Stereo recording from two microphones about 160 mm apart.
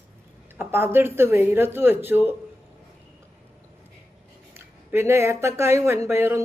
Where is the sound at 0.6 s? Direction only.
15° right (ahead or behind).